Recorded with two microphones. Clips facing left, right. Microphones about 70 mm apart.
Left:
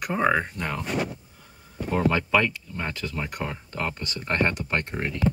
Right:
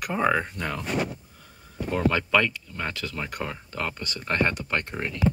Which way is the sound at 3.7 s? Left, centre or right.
Left.